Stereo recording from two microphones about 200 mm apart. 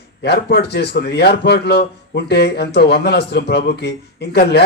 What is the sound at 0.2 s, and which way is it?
A man's voice, 55° left (ahead or behind).